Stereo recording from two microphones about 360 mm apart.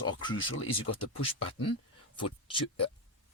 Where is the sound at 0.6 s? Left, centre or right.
Left.